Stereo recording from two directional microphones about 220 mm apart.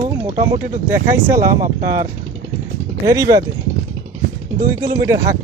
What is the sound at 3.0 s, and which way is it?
Speech, 15° right (ahead or behind).